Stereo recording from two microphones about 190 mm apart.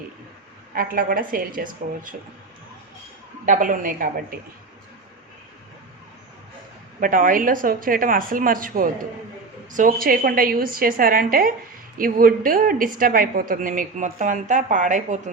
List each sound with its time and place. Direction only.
0.7 s a woman's voice: 50° right (ahead or behind)
3.4 s a woman's voice: 45° right (ahead or behind)
7.0 s a woman's voice: 45° right (ahead or behind)